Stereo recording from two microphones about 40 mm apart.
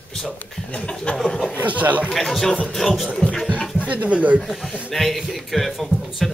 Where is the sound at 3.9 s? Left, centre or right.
Right.